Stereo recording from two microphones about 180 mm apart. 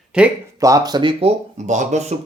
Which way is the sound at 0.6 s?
20° right (ahead or behind).